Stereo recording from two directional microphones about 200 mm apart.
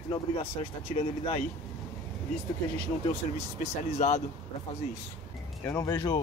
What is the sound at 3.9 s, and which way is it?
Speech, 35° left (ahead or behind).